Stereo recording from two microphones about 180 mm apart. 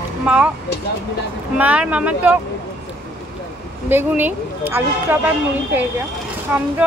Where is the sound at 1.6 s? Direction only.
5° right (ahead or behind).